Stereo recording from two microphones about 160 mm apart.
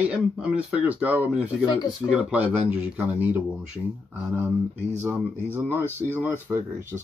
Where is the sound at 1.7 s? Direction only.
25° left (ahead or behind).